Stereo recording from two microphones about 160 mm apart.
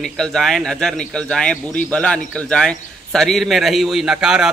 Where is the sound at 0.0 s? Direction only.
Centre (ahead or behind).